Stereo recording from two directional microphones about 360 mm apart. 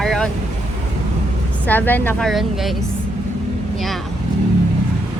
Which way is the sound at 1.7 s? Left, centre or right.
Centre.